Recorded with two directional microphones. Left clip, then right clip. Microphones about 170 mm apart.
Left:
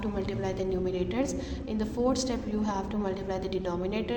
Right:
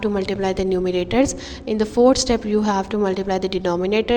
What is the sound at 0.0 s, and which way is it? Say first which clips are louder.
A woman's voice: right 11 dB; 45° right (ahead or behind).